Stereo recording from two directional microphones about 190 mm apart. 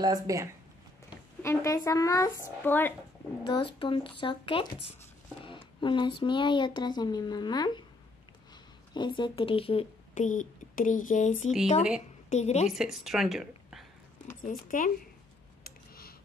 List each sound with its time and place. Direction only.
0.0 s speech: 20° right (ahead or behind)
1.4 s speech: 15° left (ahead or behind)
3.4 s speech: 25° left (ahead or behind)
8.9 s speech: 25° left (ahead or behind)
12.7 s a woman's voice: centre (ahead or behind)
14.4 s speech: 45° left (ahead or behind)
15.6 s a sound: 50° left (ahead or behind)